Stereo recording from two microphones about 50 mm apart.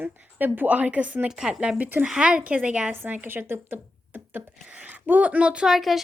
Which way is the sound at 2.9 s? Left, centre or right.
Right.